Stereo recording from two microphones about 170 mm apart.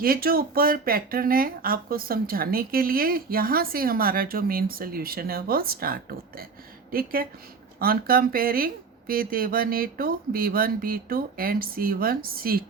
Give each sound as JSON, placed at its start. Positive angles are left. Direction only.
{"t": 0.0, "sound": "speech", "side_deg": -60}